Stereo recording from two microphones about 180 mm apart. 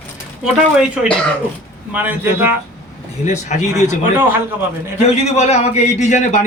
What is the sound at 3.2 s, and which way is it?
Speech, 40° left (ahead or behind).